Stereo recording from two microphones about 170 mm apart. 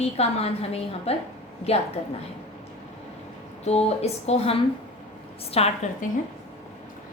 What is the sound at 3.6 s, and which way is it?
Speech, 40° left (ahead or behind).